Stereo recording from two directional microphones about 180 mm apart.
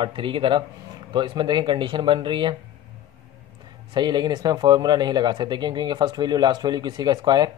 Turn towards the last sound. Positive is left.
turn(degrees=-25)  # may be behind; listen again after turning